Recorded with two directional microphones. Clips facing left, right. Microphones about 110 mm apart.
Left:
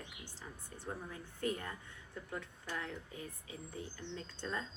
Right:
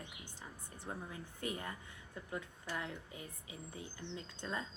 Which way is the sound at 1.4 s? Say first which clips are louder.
Left 4 dB; 15° right (ahead or behind).